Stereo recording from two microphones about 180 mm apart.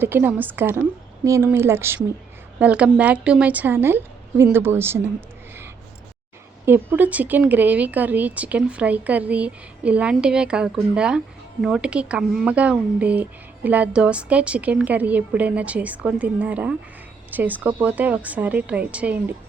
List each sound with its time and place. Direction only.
0.0 s speech: 10° right (ahead or behind)
6.7 s speech: 10° right (ahead or behind)